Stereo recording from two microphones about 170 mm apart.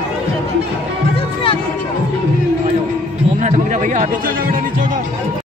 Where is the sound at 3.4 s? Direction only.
45° right (ahead or behind).